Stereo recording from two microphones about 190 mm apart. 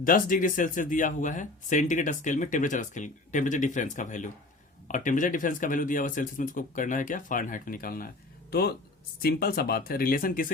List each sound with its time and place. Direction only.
0.0 s speech: 45° left (ahead or behind)